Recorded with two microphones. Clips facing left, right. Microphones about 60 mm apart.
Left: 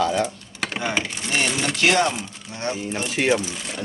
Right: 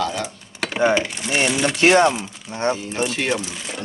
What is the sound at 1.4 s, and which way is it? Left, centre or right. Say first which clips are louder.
Speech: right 4 dB; centre.